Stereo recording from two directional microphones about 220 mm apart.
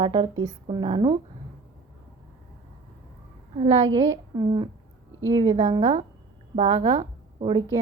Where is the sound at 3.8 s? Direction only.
15° right (ahead or behind).